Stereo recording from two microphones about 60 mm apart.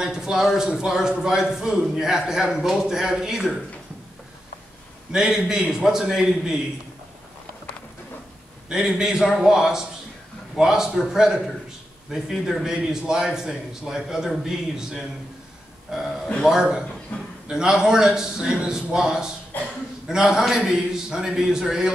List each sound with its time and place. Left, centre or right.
0.0 s a man's voice: centre
5.1 s a man's voice: centre
8.7 s a man's voice: centre
12.6 s a man's voice: centre
16.4 s a man's voice: centre
17.1 s a man's voice: left
17.5 s a man's voice: centre
19.5 s speech: left
20.1 s a man's voice: centre